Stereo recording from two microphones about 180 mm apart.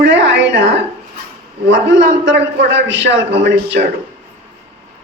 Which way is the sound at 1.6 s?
90° right.